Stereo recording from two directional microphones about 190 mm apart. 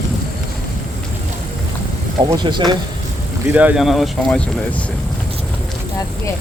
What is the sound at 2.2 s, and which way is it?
Speech, 25° right (ahead or behind).